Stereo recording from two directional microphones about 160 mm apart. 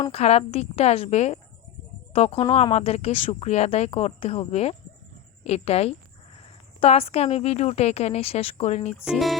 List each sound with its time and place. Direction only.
0.1 s a woman's voice: 40° left (ahead or behind)
9.0 s speech: centre (ahead or behind)